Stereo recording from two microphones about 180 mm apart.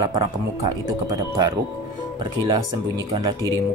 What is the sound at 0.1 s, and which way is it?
Speech, 20° right (ahead or behind).